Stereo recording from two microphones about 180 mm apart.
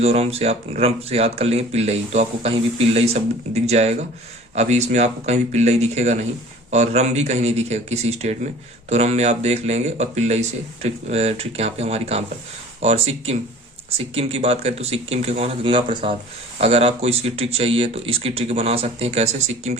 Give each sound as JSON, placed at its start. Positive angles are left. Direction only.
{"t": 0.0, "sound": "speech", "side_deg": -35}